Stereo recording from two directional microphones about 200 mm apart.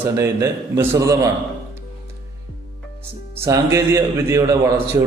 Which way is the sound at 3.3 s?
15° right (ahead or behind).